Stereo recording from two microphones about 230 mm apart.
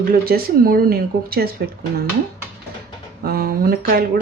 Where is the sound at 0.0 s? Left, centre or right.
Right.